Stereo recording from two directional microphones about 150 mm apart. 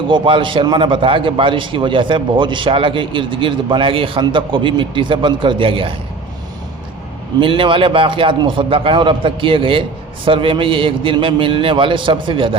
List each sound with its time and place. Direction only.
0.1 s a man's voice: 35° right (ahead or behind)
7.3 s a man's voice: 35° right (ahead or behind)